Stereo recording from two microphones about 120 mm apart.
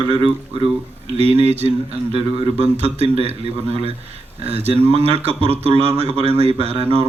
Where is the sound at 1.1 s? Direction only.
60° right (ahead or behind).